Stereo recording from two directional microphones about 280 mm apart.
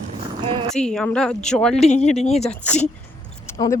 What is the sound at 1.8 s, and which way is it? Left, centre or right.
Speech, left.